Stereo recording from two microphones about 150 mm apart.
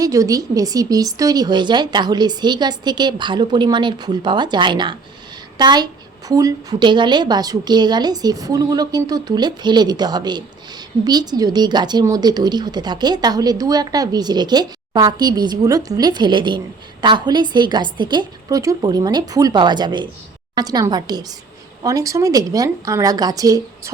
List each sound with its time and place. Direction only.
0.0 s a woman's voice: 20° right (ahead or behind)